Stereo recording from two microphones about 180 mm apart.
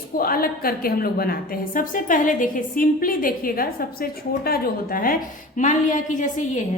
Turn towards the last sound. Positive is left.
turn(degrees=45)  # may be behind; listen again after turning